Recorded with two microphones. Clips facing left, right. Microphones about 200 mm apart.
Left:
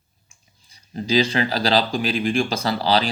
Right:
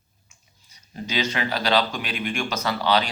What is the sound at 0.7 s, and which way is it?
Speech, 30° left (ahead or behind).